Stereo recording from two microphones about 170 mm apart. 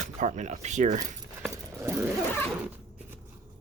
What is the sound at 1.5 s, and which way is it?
Chainsaw, 15° right (ahead or behind).